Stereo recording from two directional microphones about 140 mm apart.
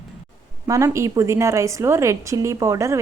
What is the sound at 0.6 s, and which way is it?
A woman's voice, 20° right (ahead or behind).